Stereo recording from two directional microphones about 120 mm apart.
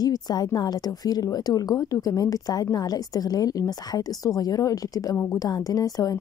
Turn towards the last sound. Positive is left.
turn(degrees=30)  # may be behind; listen again after turning